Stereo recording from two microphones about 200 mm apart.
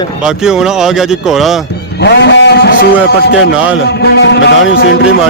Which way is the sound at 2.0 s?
60° left (ahead or behind).